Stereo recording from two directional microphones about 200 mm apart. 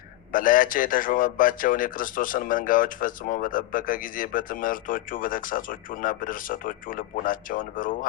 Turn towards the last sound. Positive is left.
turn(degrees=45)  # may be behind; listen again after turning